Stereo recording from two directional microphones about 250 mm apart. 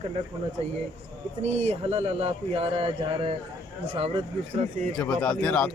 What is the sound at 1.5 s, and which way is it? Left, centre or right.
Speech, right.